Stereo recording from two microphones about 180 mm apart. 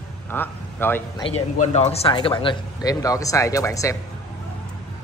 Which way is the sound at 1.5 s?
35° left (ahead or behind).